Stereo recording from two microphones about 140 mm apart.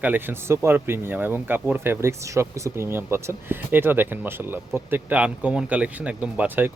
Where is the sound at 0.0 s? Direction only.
15° right (ahead or behind).